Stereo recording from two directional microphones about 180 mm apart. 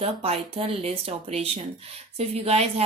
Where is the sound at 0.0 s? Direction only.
35° right (ahead or behind).